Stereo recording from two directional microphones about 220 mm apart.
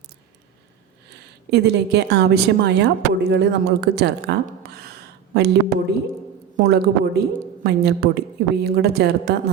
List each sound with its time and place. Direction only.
1.5 s speech: 50° right (ahead or behind)